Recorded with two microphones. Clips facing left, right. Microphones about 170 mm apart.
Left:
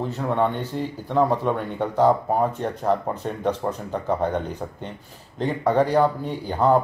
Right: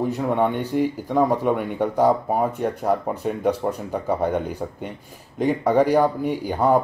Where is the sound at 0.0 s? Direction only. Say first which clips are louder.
Right 2 dB; 10° right (ahead or behind).